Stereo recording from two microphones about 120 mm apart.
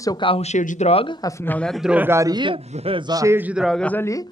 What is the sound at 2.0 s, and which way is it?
Speech, 20° right (ahead or behind).